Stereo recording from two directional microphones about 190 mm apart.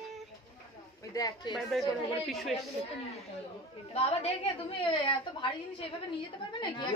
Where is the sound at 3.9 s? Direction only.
30° left (ahead or behind).